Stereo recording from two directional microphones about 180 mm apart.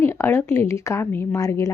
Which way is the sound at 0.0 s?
15° left (ahead or behind).